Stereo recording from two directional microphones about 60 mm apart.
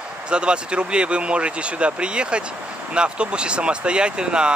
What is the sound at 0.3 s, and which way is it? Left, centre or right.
Speech, centre.